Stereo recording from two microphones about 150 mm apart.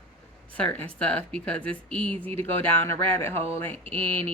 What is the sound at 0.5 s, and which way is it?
Speech, 10° left (ahead or behind).